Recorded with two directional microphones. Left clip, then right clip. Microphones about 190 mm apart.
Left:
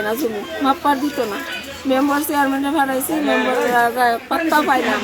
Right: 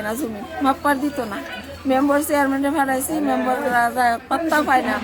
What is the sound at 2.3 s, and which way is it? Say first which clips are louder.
Speech: left 1 dB; 25° right (ahead or behind).